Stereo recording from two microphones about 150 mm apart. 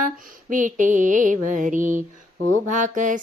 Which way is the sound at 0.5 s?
60° right (ahead or behind).